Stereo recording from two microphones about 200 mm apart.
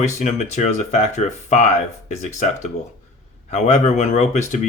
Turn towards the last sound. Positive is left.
turn(degrees=35)  # may be behind; listen again after turning